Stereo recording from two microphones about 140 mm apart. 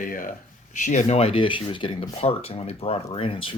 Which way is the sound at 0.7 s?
60° left (ahead or behind).